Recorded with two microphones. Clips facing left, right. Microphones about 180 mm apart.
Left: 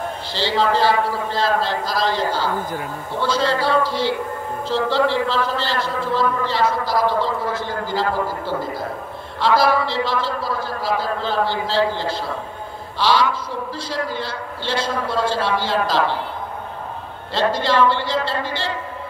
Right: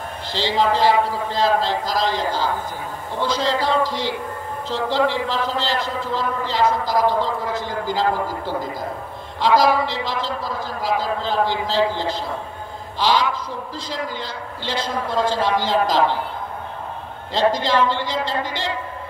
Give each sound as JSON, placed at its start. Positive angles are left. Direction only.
{"t": 0.3, "sound": "a man's voice", "side_deg": -15}
{"t": 17.3, "sound": "a man's voice", "side_deg": -15}